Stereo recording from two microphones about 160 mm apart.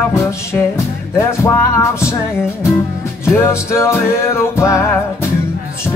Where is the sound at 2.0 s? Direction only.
5° right (ahead or behind).